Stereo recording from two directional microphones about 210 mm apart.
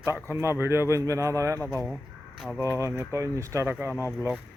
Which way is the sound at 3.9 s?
10° left (ahead or behind).